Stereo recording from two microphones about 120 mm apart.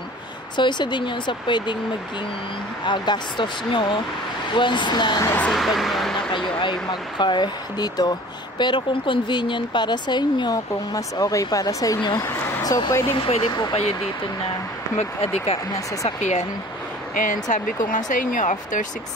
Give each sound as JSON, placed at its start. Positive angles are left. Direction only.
{"t": 0.6, "sound": "speech", "side_deg": 40}
{"t": 2.8, "sound": "speech", "side_deg": 40}
{"t": 5.5, "sound": "speech", "side_deg": 0}
{"t": 6.3, "sound": "speech", "side_deg": 40}
{"t": 12.3, "sound": "speech", "side_deg": 20}
{"t": 13.1, "sound": "speech", "side_deg": 50}
{"t": 13.5, "sound": "speech", "side_deg": 35}
{"t": 15.0, "sound": "speech", "side_deg": 55}
{"t": 16.2, "sound": "speech", "side_deg": 75}
{"t": 17.3, "sound": "speech", "side_deg": 90}